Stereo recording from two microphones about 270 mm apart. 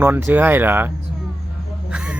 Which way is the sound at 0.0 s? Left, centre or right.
Centre.